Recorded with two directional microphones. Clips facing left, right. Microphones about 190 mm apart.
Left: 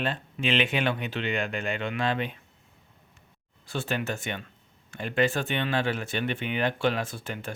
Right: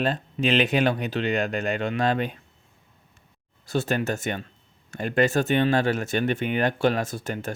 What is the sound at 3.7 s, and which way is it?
Speech, 40° right (ahead or behind).